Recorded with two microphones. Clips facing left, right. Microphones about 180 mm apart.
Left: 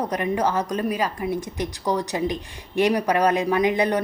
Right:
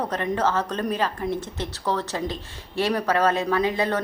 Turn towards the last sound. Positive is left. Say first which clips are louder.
# left 3 dB
turn(degrees=15)  # may be behind; listen again after turning